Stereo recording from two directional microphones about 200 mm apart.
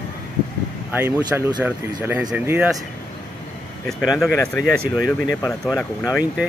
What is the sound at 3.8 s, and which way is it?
Speech, centre (ahead or behind).